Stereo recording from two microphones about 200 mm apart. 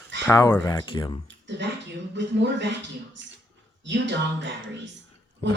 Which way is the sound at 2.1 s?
60° right (ahead or behind).